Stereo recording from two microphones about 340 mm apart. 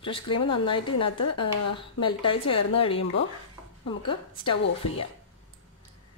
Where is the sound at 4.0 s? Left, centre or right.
Centre.